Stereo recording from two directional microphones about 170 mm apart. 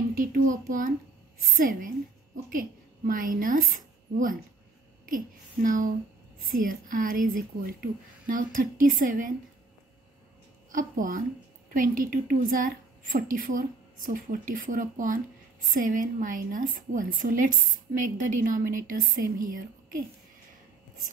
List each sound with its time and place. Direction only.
0.1 s a woman's voice: 55° right (ahead or behind)
10.7 s a woman's voice: 50° right (ahead or behind)